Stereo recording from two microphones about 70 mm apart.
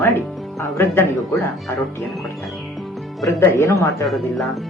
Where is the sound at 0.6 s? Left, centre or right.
Left.